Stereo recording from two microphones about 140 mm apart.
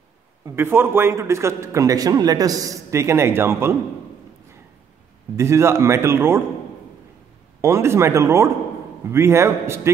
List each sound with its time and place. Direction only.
0.6 s a man's voice: 15° right (ahead or behind)
5.3 s a man's voice: 20° right (ahead or behind)
7.6 s a man's voice: 20° right (ahead or behind)